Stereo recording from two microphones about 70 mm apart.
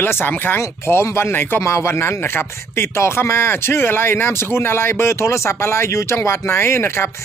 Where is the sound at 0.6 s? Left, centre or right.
Left.